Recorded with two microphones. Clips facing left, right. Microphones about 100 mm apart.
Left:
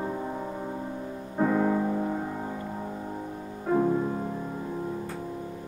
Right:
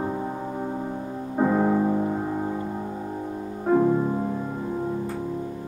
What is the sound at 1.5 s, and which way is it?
Music, 25° right (ahead or behind).